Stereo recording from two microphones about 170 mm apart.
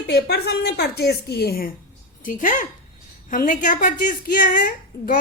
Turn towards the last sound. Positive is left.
turn(degrees=50)  # may be behind; listen again after turning